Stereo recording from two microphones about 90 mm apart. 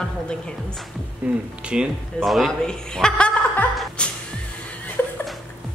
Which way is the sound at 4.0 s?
10° left (ahead or behind).